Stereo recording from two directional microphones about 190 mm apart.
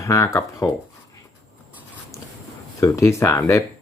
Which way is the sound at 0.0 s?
15° left (ahead or behind).